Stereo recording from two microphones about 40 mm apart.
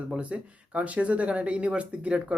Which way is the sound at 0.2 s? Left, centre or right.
Right.